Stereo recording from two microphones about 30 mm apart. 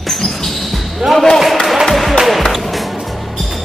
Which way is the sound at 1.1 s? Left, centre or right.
Centre.